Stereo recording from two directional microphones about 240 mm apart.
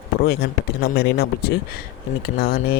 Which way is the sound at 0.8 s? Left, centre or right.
Left.